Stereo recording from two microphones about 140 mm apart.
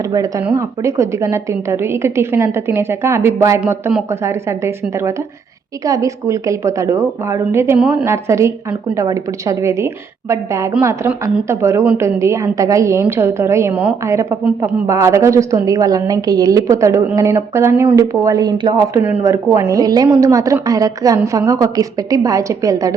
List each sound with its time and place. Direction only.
0.0 s a woman's voice: 25° right (ahead or behind)